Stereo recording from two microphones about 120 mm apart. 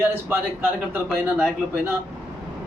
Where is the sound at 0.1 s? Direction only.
15° right (ahead or behind).